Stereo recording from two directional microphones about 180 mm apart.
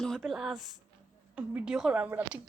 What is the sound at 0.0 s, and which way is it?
Speech, centre (ahead or behind).